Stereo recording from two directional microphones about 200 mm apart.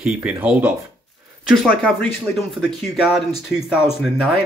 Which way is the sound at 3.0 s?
Centre (ahead or behind).